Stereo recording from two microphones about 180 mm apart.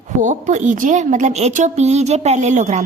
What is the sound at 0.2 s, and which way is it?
A woman's voice, 40° right (ahead or behind).